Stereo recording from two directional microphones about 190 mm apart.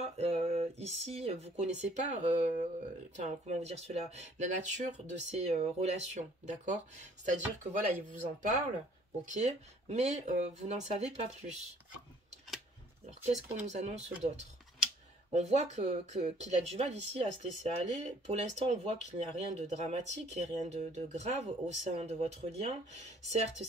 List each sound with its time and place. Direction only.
0.0 s speech: 35° right (ahead or behind)
7.9 s speech: 40° right (ahead or behind)
13.0 s speech: 35° right (ahead or behind)
15.3 s speech: 35° right (ahead or behind)